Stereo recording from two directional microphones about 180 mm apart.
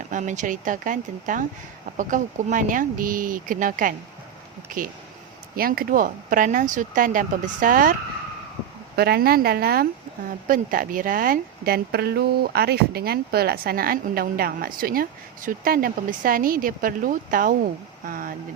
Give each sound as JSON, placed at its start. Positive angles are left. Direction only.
{"t": 0.1, "sound": "speech", "side_deg": -45}
{"t": 9.0, "sound": "speech", "side_deg": -60}